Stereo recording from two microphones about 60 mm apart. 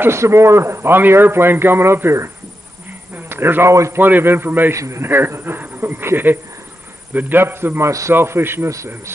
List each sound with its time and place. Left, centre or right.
0.0 s a man's voice: right
3.2 s a sound: right
3.6 s a man's voice: right
4.0 s speech: right
4.7 s speech: right
5.0 s speech: right
8.6 s speech: right